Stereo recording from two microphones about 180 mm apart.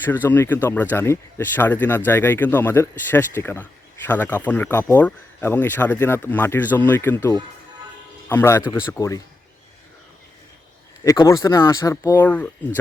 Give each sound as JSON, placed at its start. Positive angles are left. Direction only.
{"t": 0.0, "sound": "speech", "side_deg": 10}
{"t": 11.0, "sound": "speech", "side_deg": 15}